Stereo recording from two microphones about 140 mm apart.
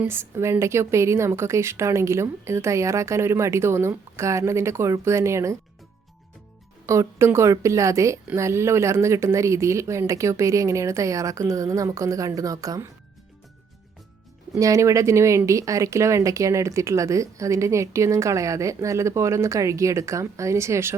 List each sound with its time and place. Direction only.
0.0 s speech: 15° right (ahead or behind)
6.8 s speech: 20° right (ahead or behind)
14.6 s speech: 25° right (ahead or behind)